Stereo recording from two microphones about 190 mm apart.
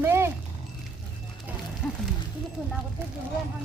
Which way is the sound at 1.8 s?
10° left (ahead or behind).